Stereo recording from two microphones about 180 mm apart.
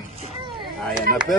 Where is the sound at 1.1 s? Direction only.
50° right (ahead or behind).